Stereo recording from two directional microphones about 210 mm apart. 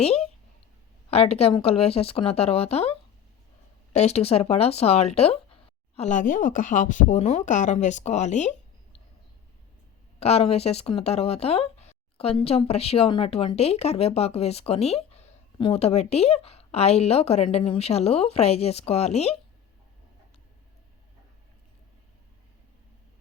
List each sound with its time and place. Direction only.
0.0 s speech: 30° left (ahead or behind)
10.2 s speech: 30° left (ahead or behind)